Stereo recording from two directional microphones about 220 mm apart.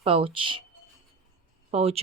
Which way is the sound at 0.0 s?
25° right (ahead or behind).